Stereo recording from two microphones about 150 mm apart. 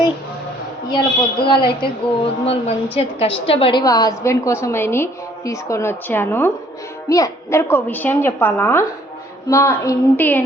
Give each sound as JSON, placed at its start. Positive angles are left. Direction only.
{"t": 0.9, "sound": "a woman's voice", "side_deg": 30}